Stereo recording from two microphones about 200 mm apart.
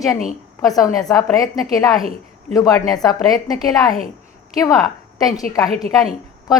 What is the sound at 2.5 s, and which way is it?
A woman's voice, 20° left (ahead or behind).